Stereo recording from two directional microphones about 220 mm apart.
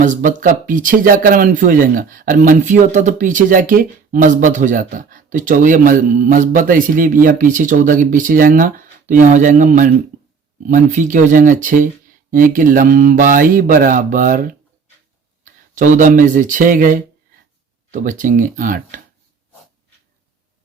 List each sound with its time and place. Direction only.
0.0 s speech: 35° right (ahead or behind)